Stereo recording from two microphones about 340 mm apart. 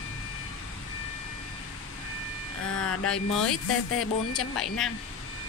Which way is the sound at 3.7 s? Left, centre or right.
Left.